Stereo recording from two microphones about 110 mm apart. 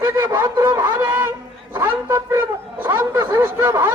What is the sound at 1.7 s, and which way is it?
Speech, 20° right (ahead or behind).